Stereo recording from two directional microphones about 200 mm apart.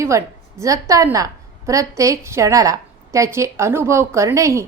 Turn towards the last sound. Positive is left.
turn(degrees=-15)  # may be behind; listen again after turning